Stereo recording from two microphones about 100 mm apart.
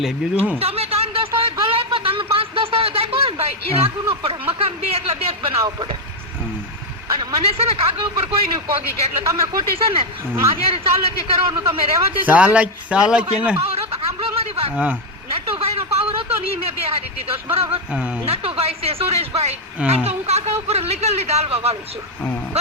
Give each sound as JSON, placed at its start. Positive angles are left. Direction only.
{"t": 0.6, "sound": "a sound", "side_deg": -85}
{"t": 1.4, "sound": "a sound", "side_deg": -70}
{"t": 4.2, "sound": "speech", "side_deg": -70}
{"t": 5.6, "sound": "speech", "side_deg": -50}
{"t": 7.1, "sound": "speech", "side_deg": -50}
{"t": 7.4, "sound": "speech", "side_deg": -80}
{"t": 9.2, "sound": "speech", "side_deg": -35}
{"t": 9.7, "sound": "speech", "side_deg": -70}
{"t": 12.2, "sound": "a man's voice", "side_deg": -15}
{"t": 13.6, "sound": "snicker", "side_deg": -80}
{"t": 15.4, "sound": "speech", "side_deg": -70}
{"t": 22.5, "sound": "music", "side_deg": -90}